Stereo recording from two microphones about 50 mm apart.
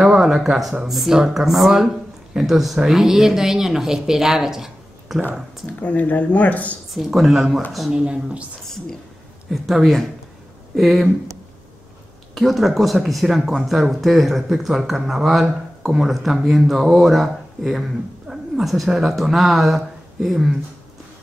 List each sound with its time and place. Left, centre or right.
0.0 s speech: centre
5.7 s speech: left
6.9 s speech: centre
8.0 s speech: right
8.6 s whispering: centre
9.5 s speech: centre
12.4 s speech: centre